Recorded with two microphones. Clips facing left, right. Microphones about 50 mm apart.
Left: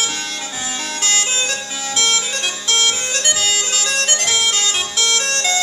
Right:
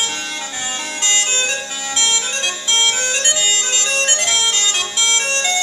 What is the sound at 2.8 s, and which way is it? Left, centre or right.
Music, centre.